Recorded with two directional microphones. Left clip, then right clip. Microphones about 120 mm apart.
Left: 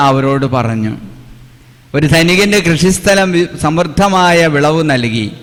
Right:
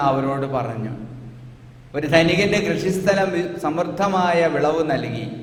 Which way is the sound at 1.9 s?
30° left (ahead or behind).